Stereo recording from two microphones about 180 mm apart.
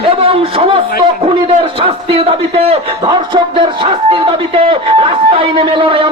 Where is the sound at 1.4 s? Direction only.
30° right (ahead or behind).